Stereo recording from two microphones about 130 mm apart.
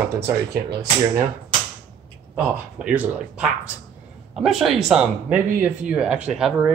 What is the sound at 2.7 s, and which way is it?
Speech, 10° right (ahead or behind).